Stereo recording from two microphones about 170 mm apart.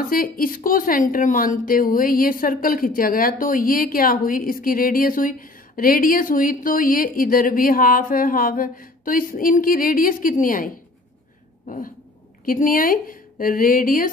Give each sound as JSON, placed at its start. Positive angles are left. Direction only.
{"t": 0.0, "sound": "speech", "side_deg": 55}
{"t": 11.6, "sound": "a sound", "side_deg": 50}
{"t": 12.4, "sound": "speech", "side_deg": 55}